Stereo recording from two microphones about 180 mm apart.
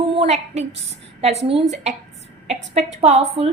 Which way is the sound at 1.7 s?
40° right (ahead or behind).